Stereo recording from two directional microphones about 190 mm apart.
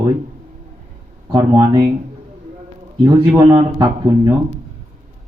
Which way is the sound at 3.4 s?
25° right (ahead or behind).